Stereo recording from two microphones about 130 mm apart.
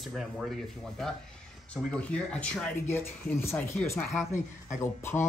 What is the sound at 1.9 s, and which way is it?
Speech, 10° left (ahead or behind).